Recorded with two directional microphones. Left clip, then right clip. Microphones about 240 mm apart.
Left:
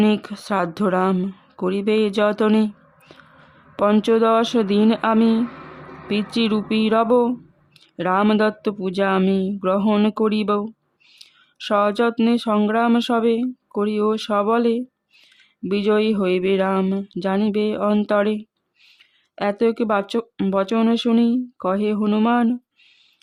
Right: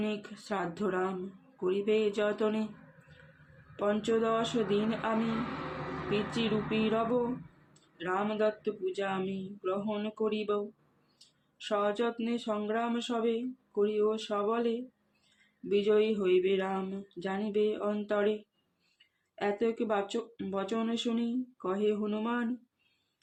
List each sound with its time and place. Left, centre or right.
0.0 s speech: left
3.8 s speech: left
19.4 s speech: left